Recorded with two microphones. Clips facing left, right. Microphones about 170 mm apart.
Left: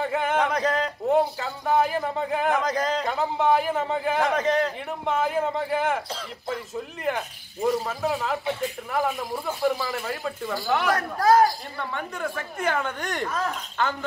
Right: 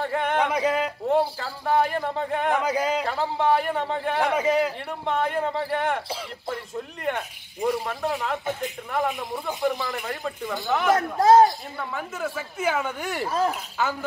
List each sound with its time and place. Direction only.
0.0 s a sound: centre (ahead or behind)
0.5 s a sound: 10° right (ahead or behind)
1.4 s a man's voice: centre (ahead or behind)
2.6 s a man's voice: 10° right (ahead or behind)
5.0 s a man's voice: centre (ahead or behind)
10.9 s speech: 25° right (ahead or behind)
11.9 s a man's voice: 5° right (ahead or behind)